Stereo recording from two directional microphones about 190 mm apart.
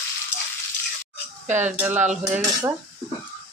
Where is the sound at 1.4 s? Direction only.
10° right (ahead or behind).